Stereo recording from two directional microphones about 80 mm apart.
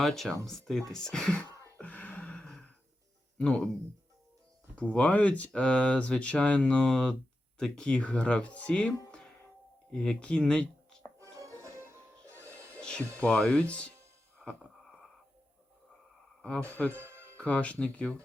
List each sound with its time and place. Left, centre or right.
0.0 s speech: centre
1.8 s a sound: centre
3.3 s speech: centre
4.7 s speech: centre
11.2 s music: right
12.8 s speech: centre
14.3 s a sound: centre
16.4 s speech: centre
16.9 s music: right
17.3 s speech: centre